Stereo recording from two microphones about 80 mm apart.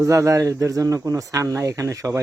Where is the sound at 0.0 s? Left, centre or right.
Right.